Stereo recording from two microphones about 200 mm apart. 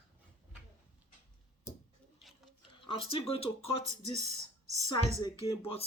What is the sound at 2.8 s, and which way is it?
A man's voice, 25° left (ahead or behind).